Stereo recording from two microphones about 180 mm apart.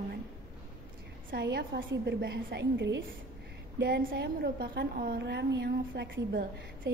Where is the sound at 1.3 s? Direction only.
60° right (ahead or behind); by 3.0 s 85° right.